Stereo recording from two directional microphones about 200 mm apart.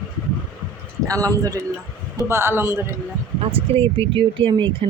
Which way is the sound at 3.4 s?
25° right (ahead or behind).